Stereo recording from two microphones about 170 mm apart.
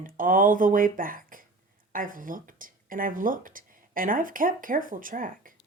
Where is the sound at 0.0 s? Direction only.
55° right (ahead or behind).